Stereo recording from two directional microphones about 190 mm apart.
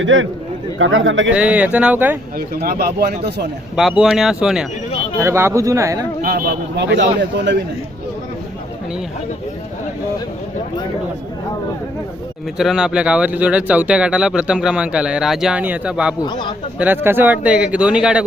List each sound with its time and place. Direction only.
0.0 s a man's voice: 90° right
1.3 s speech: 5° right (ahead or behind)
2.6 s speech: 55° right (ahead or behind)
3.8 s speech: centre (ahead or behind)
5.2 s speech: 15° right (ahead or behind)
6.2 s speech: 55° right (ahead or behind)
12.5 s speech: 5° right (ahead or behind)
16.2 s speech: 25° left (ahead or behind)
16.7 s speech: 10° right (ahead or behind)